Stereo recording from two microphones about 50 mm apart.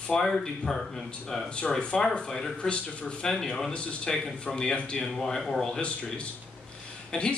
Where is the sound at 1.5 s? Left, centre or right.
Centre.